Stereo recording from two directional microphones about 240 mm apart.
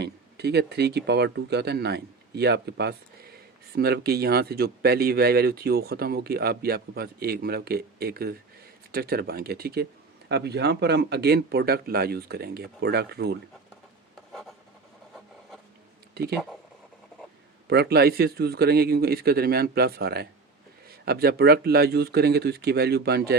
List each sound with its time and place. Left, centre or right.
0.0 s speech: right
17.7 s speech: right